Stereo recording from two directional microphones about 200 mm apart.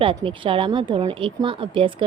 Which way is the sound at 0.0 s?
25° right (ahead or behind).